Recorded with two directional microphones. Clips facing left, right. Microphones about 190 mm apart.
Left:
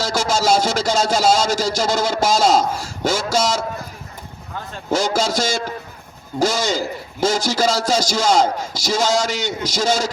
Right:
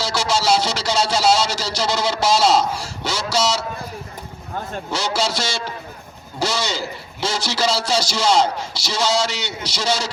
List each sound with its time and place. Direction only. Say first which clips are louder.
0.0 s a man's voice: left 2 dB; 45° left (ahead or behind)
4.9 s a man's voice: left 5 dB; 45° left (ahead or behind)